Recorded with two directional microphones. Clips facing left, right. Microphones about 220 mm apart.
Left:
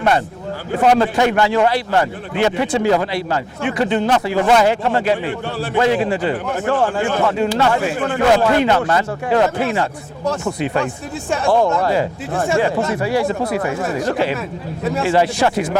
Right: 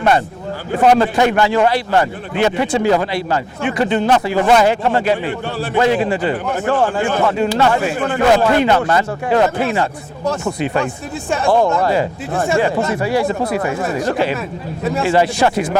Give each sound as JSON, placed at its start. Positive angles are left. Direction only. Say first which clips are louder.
{"t": 0.8, "sound": "a man's voice", "louder": "right 2 dB", "side_deg": -20}
{"t": 11.3, "sound": "a man's voice", "louder": "right 1 dB", "side_deg": -20}